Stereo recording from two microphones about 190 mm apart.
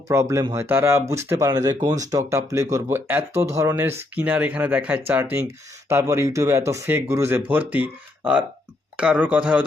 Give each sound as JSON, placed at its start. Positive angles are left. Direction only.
{"t": 0.1, "sound": "speech", "side_deg": -15}